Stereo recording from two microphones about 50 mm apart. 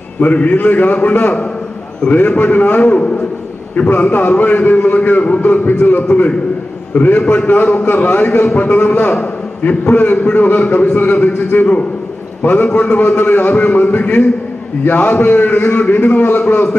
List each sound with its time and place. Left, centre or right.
0.2 s a man's voice: left
6.9 s a man's voice: left